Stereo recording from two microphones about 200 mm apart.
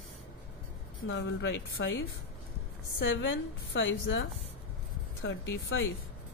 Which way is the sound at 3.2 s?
70° left (ahead or behind).